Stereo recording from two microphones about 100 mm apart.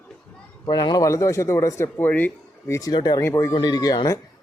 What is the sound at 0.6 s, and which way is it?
Speech, 40° left (ahead or behind).